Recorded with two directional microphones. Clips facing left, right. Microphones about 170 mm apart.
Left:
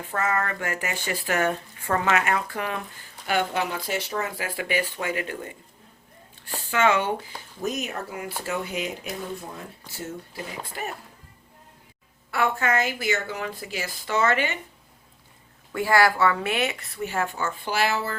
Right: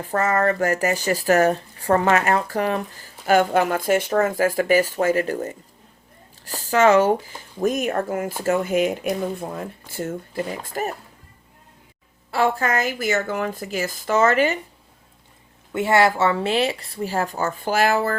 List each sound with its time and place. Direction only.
0.0 s speech: 40° right (ahead or behind)
12.3 s speech: 30° right (ahead or behind)
15.7 s speech: 25° right (ahead or behind); by 18.2 s 50° right (ahead or behind)